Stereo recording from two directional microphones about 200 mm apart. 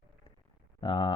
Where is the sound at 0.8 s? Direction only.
25° left (ahead or behind).